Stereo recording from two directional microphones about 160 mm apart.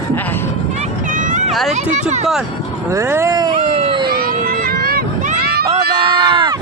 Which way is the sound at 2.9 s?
15° right (ahead or behind).